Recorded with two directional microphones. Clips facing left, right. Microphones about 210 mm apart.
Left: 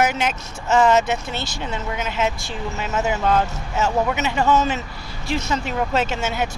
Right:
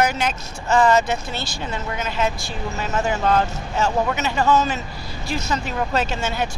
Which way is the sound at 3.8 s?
20° left (ahead or behind).